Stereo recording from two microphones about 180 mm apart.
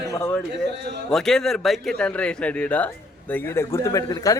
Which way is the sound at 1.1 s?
5° left (ahead or behind).